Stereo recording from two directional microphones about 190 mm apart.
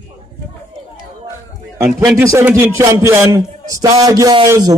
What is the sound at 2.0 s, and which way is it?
A man's voice, 10° right (ahead or behind).